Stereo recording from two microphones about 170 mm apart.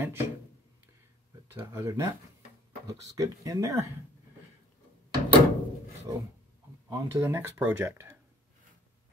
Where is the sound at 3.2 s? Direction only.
20° right (ahead or behind).